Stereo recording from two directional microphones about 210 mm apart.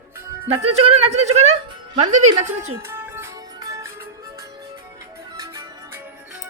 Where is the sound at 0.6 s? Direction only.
30° right (ahead or behind).